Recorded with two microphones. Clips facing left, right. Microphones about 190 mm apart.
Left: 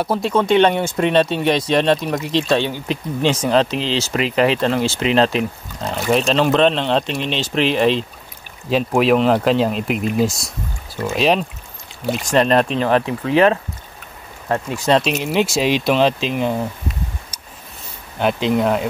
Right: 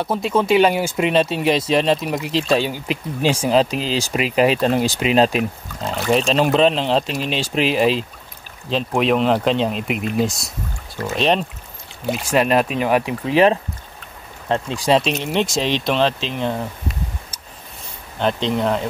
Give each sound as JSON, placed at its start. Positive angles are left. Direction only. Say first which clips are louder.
{"t": 0.0, "sound": "speech", "louder": "left 1 dB", "side_deg": 0}
{"t": 5.9, "sound": "speech", "louder": "left 1 dB", "side_deg": 0}
{"t": 8.6, "sound": "speech", "louder": "left 3 dB", "side_deg": 5}
{"t": 12.3, "sound": "speech", "louder": "left 2 dB", "side_deg": -5}
{"t": 14.8, "sound": "speech", "louder": "left 1 dB", "side_deg": -5}
{"t": 18.2, "sound": "speech", "louder": "left 2 dB", "side_deg": 5}